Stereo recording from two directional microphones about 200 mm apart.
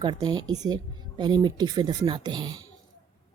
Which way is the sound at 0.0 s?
20° right (ahead or behind).